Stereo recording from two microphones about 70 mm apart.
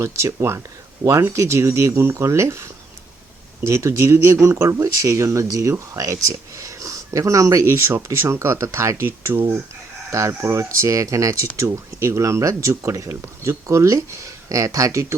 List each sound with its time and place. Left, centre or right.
0.0 s speech: right
5.9 s a sound: right
7.6 s speech: right